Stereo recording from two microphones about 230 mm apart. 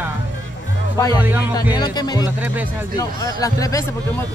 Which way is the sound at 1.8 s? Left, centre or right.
Centre.